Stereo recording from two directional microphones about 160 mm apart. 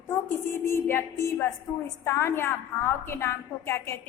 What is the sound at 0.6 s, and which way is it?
A woman's voice, 15° left (ahead or behind).